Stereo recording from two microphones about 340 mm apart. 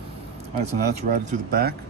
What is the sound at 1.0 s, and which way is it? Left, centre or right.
Speech, right.